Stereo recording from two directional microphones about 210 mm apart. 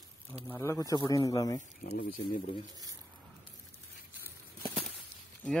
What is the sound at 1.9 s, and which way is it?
Speech, 40° left (ahead or behind).